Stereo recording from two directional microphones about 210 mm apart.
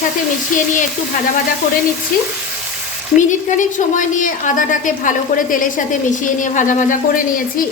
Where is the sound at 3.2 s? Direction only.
35° left (ahead or behind).